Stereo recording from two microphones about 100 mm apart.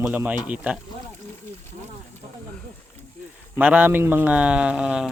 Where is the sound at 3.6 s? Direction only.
15° right (ahead or behind).